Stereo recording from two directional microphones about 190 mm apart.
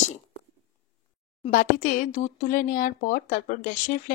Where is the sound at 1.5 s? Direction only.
45° left (ahead or behind).